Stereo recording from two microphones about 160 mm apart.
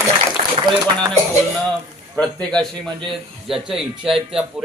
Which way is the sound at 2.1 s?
5° left (ahead or behind).